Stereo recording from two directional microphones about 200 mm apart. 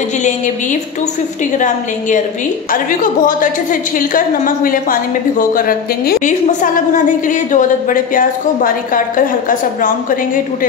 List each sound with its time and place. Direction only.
2.7 s a woman's voice: 40° left (ahead or behind)